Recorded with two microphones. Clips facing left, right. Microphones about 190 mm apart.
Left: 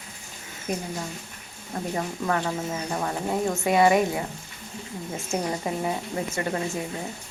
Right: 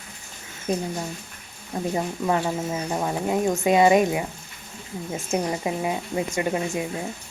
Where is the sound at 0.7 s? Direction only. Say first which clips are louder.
Right 4 dB; 25° right (ahead or behind).